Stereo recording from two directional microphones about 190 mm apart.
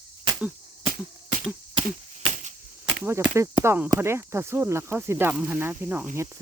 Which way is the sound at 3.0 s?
10° right (ahead or behind).